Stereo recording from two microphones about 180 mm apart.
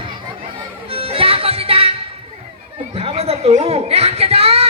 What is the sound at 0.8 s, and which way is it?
Music, 30° right (ahead or behind).